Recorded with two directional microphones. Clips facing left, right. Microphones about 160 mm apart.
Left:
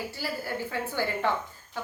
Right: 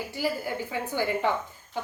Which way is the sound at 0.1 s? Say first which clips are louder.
Right 4 dB; 15° right (ahead or behind).